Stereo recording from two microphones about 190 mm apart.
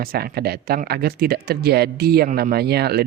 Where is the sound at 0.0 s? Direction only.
50° right (ahead or behind).